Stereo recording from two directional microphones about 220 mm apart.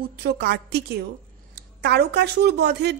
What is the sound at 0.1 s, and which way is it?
Speech, 45° right (ahead or behind).